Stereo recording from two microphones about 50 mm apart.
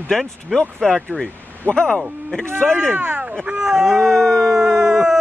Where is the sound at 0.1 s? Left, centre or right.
Centre.